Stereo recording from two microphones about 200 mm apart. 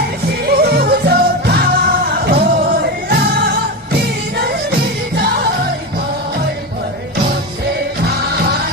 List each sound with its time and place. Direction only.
0.4 s music: 50° right (ahead or behind)